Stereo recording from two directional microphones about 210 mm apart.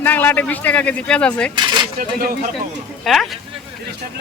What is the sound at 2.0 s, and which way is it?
Speech, 45° right (ahead or behind).